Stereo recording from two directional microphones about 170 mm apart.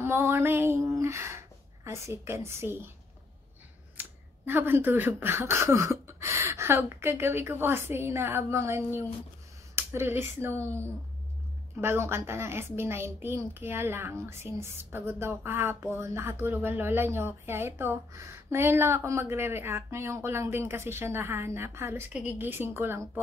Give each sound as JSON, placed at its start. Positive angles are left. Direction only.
{"t": 0.0, "sound": "a woman's voice", "side_deg": -15}
{"t": 3.9, "sound": "a woman's voice", "side_deg": -10}
{"t": 11.8, "sound": "a woman's voice", "side_deg": -15}